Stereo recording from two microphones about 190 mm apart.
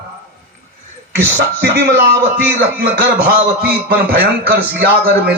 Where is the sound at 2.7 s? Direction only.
50° right (ahead or behind).